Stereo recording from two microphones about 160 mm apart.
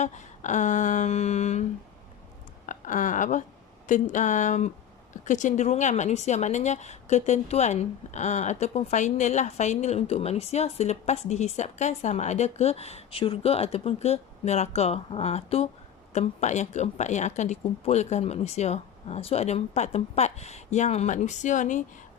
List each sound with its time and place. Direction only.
0.0 s a woman's voice: 50° left (ahead or behind)
2.6 s a woman's voice: 55° left (ahead or behind)